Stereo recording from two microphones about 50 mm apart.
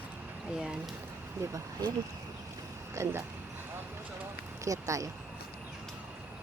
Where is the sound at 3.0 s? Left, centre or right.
Right.